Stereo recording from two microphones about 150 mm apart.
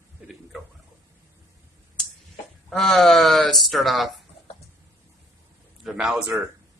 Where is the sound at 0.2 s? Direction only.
5° right (ahead or behind).